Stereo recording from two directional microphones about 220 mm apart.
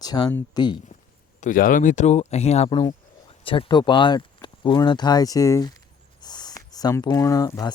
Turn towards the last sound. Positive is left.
turn(degrees=15)  # may be behind; listen again after turning